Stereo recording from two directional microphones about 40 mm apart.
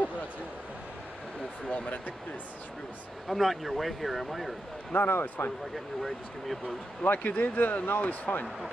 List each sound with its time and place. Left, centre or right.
1.7 s speech: left
3.3 s speech: centre
4.9 s speech: left
6.0 s speech: centre
7.0 s speech: left